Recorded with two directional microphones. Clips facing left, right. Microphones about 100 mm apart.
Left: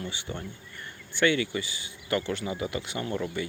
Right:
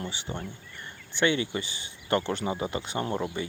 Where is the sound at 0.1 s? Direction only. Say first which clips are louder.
Right 1 dB; 20° right (ahead or behind).